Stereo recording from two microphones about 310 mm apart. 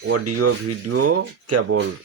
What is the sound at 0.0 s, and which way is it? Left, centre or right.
Speech, right.